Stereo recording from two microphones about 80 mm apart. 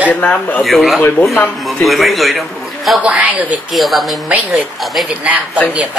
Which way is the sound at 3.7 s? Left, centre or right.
Centre.